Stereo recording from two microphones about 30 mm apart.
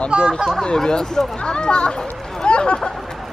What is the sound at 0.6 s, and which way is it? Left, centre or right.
Speech, left.